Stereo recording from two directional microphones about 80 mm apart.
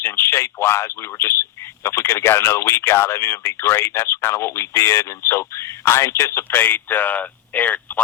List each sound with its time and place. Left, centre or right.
0.0 s a man's voice: left
6.5 s speech: left